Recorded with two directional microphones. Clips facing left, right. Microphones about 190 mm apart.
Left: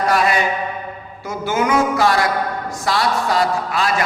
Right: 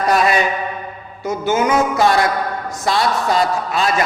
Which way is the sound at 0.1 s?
20° right (ahead or behind).